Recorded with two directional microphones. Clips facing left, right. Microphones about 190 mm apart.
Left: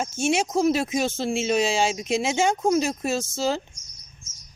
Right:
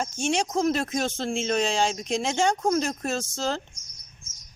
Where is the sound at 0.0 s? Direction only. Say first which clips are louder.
Left 3 dB; 5° left (ahead or behind).